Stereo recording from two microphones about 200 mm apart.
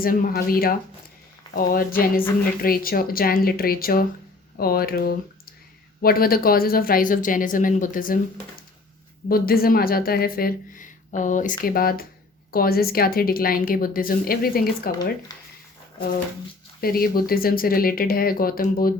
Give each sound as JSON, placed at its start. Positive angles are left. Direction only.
{"t": 0.0, "sound": "a woman's voice", "side_deg": 45}
{"t": 9.3, "sound": "a woman's voice", "side_deg": 50}
{"t": 16.8, "sound": "a woman's voice", "side_deg": 50}